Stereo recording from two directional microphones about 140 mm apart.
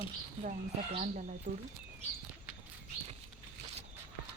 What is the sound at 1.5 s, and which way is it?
Speech, 65° right (ahead or behind).